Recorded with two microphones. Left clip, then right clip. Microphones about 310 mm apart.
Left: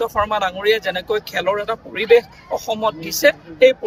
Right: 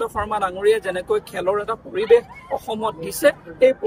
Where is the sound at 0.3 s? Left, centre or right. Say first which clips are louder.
Left 1 dB; centre.